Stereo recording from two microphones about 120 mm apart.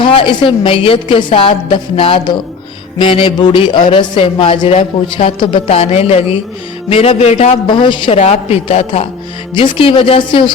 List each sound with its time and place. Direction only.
0.0 s a man's voice: 45° left (ahead or behind); by 7.6 s 65° left (ahead or behind)
7.7 s a woman's voice: 40° left (ahead or behind)
8.1 s a woman's voice: 60° left (ahead or behind)
9.6 s a man's voice: 50° left (ahead or behind)